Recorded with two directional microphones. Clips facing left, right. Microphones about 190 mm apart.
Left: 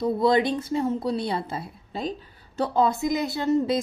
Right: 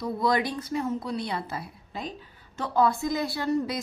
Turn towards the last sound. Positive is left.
turn(degrees=25)  # may be behind; listen again after turning